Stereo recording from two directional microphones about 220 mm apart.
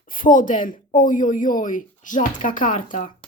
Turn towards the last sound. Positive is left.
turn(degrees=35)  # may be behind; listen again after turning